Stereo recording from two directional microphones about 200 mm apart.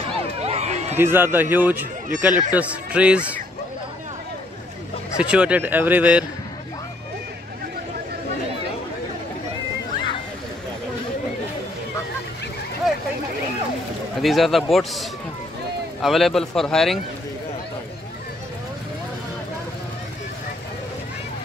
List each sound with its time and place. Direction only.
0.4 s a sound: 30° right (ahead or behind)
0.9 s speech: 10° right (ahead or behind)
5.1 s speech: 5° right (ahead or behind)
14.2 s a man's voice: centre (ahead or behind)